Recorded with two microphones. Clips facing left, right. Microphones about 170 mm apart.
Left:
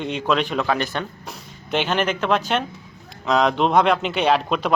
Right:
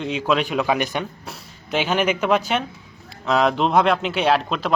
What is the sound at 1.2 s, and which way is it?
Speech, centre (ahead or behind).